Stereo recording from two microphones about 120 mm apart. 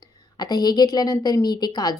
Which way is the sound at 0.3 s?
35° left (ahead or behind).